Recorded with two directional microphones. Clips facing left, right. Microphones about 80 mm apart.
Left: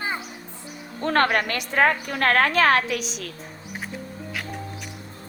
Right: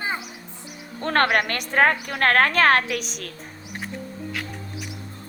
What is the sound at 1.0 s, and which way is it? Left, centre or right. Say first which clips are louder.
A woman's voice: even; right.